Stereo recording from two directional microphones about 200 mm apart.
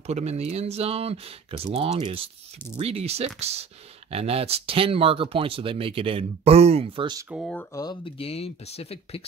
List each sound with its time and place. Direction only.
0.0 s speech: 35° right (ahead or behind)
7.2 s speech: centre (ahead or behind)
7.7 s speech: 20° left (ahead or behind)